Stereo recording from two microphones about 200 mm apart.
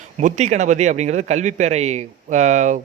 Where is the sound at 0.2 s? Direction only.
40° right (ahead or behind).